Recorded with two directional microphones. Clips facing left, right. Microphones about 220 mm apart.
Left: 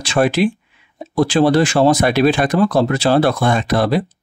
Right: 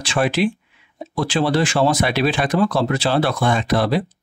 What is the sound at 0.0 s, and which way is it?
Speech, 40° left (ahead or behind).